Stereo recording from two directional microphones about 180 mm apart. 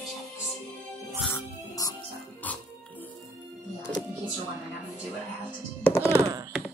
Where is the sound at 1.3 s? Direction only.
20° left (ahead or behind).